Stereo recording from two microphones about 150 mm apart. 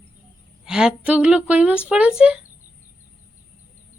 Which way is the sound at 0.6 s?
5° right (ahead or behind).